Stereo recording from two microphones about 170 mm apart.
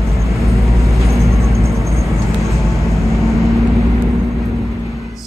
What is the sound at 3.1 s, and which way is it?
Vehicle, centre (ahead or behind).